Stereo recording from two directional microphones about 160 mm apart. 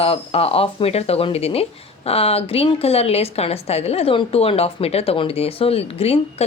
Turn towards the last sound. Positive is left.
turn(degrees=40)  # may be behind; listen again after turning